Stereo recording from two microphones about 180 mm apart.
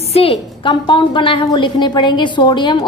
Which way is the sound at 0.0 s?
35° left (ahead or behind).